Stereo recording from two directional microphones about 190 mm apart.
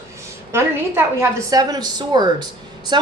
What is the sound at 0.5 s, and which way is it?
A woman's voice, 15° right (ahead or behind).